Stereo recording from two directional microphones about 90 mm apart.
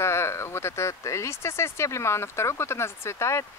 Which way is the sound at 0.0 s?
30° left (ahead or behind).